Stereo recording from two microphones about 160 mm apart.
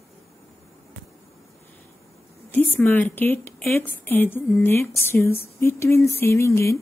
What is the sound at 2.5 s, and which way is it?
A woman's voice, 10° left (ahead or behind).